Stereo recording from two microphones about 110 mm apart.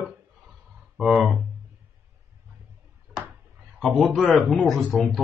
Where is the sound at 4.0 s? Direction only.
5° left (ahead or behind).